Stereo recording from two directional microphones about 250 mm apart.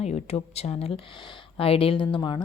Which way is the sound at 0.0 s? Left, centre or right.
Left.